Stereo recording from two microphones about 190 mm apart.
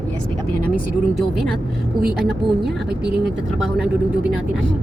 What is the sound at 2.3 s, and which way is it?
Speech, 60° right (ahead or behind).